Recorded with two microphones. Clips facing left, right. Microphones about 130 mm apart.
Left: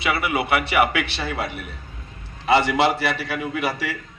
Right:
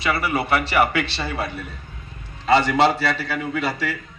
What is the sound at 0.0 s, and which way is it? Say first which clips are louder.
Speech: even; 20° left (ahead or behind).